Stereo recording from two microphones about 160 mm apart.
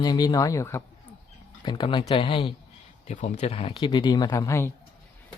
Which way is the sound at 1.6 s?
30° left (ahead or behind).